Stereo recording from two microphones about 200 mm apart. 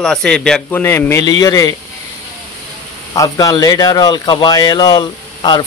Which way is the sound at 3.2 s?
20° left (ahead or behind).